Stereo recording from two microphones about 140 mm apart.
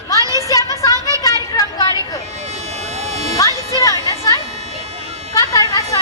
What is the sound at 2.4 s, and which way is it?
Vehicle, 50° right (ahead or behind).